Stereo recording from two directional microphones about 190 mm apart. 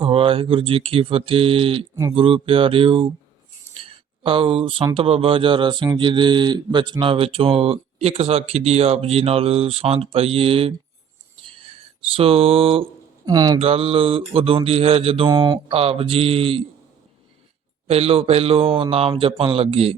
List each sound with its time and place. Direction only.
0.0 s speech: 30° right (ahead or behind)
3.8 s a sound: 30° right (ahead or behind)
4.9 s speech: 30° right (ahead or behind)
11.4 s a sound: 30° right (ahead or behind)
13.6 s mantra: 30° right (ahead or behind)
17.8 s mantra: 30° right (ahead or behind)